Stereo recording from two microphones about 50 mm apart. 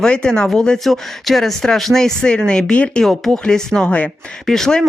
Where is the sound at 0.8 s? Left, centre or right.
Centre.